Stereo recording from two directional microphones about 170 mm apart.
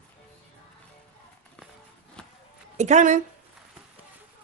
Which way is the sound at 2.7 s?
45° right (ahead or behind).